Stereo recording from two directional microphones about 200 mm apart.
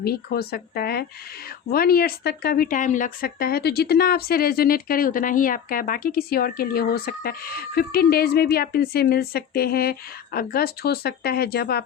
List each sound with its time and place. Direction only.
0.0 s speech: 50° left (ahead or behind)